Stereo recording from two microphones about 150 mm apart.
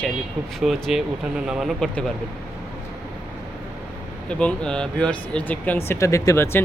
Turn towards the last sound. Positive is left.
turn(degrees=15)  # may be behind; listen again after turning